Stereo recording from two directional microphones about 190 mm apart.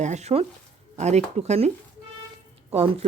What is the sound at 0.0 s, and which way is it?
Speech, 35° right (ahead or behind).